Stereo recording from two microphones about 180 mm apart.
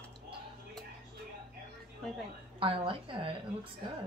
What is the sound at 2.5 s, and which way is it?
Speech, 30° right (ahead or behind).